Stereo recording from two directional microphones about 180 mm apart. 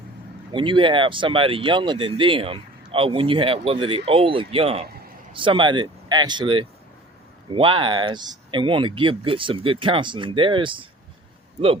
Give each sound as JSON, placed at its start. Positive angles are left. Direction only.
{"t": 0.5, "sound": "speech", "side_deg": -30}